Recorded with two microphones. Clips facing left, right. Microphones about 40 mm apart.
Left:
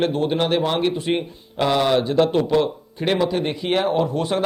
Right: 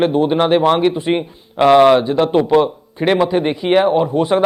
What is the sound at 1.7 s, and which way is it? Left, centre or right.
Speech, right.